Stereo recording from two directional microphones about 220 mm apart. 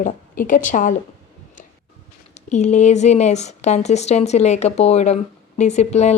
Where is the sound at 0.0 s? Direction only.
35° left (ahead or behind).